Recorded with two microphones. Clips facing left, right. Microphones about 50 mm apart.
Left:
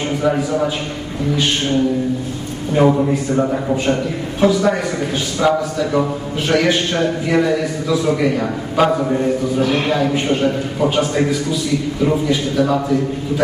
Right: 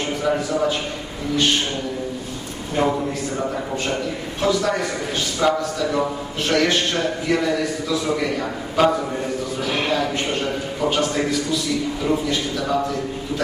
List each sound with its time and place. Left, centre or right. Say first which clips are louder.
0.2 s a man's voice: left 3 dB; centre
2.7 s a man's voice: left 7 dB; centre
6.9 s a man's voice: left 5 dB; centre
10.9 s a man's voice: left 4 dB; centre